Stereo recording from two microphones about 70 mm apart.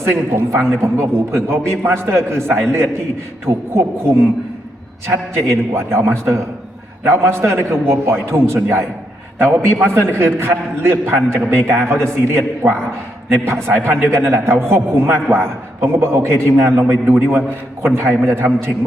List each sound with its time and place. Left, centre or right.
0.1 s a man's voice: right